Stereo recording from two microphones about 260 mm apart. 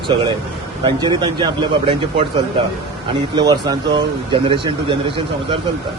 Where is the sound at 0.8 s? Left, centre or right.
Centre.